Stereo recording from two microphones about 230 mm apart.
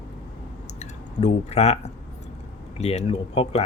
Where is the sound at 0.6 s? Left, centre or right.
Left.